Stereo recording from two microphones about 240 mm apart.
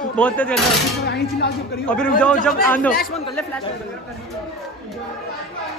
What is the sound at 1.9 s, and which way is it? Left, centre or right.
Speech, centre.